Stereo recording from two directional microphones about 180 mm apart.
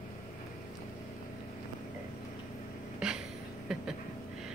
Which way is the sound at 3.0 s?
5° right (ahead or behind).